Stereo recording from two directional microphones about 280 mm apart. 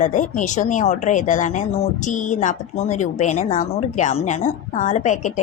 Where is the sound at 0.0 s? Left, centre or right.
Left.